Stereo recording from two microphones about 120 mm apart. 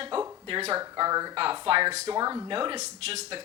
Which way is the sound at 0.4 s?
45° right (ahead or behind).